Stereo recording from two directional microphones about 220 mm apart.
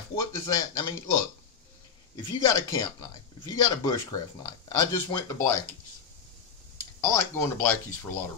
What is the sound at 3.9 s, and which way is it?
Speech, 15° left (ahead or behind).